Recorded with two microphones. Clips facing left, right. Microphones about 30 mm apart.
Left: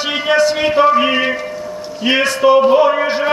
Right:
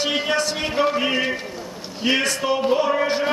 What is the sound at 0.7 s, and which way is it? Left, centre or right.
Music, centre.